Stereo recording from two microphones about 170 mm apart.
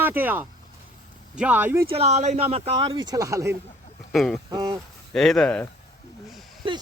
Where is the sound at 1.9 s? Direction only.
40° right (ahead or behind); by 3.6 s 20° right (ahead or behind).